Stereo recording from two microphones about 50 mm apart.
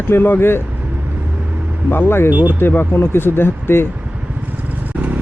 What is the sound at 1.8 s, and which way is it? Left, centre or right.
Speech, left.